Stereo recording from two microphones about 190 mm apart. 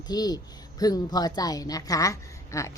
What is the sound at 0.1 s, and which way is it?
A woman's voice, 20° left (ahead or behind).